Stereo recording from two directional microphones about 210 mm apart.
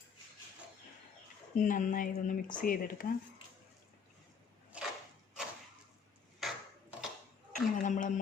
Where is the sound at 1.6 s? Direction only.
40° left (ahead or behind).